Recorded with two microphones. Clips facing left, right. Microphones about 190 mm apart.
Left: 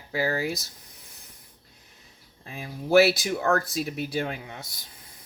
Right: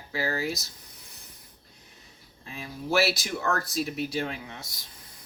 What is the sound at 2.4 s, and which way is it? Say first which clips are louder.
Speech: left 1 dB; 50° left (ahead or behind).